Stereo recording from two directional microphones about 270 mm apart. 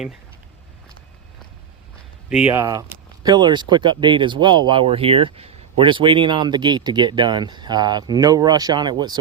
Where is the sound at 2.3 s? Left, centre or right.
Centre.